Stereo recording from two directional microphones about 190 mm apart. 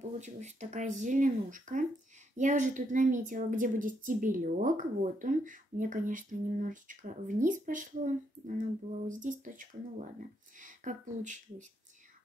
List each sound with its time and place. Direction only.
0.0 s speech: 40° right (ahead or behind)